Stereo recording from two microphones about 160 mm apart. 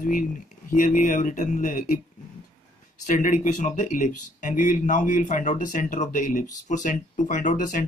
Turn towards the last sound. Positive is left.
turn(degrees=55)  # may be behind; listen again after turning